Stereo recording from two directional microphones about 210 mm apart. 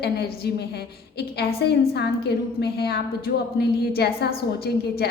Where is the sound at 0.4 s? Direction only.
50° left (ahead or behind).